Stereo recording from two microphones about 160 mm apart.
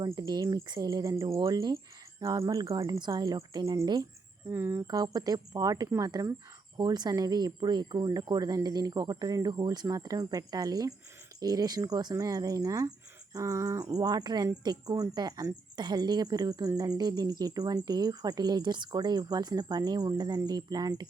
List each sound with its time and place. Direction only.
0.0 s speech: 25° right (ahead or behind)
4.4 s speech: 15° right (ahead or behind)
4.9 s speech: 25° right (ahead or behind)